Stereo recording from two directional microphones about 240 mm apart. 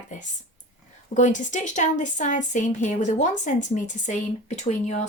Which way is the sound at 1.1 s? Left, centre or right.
Left.